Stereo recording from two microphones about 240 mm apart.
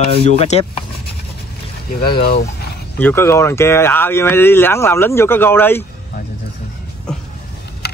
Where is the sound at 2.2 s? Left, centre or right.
Left.